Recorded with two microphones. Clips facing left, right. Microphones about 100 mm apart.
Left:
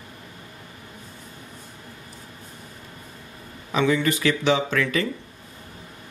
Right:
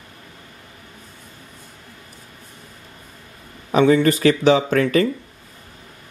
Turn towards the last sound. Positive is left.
turn(degrees=-45)  # may be behind; listen again after turning